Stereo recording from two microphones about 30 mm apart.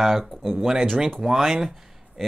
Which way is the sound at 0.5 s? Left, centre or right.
Centre.